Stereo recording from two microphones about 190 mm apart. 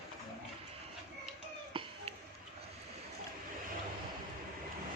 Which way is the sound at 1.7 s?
25° right (ahead or behind).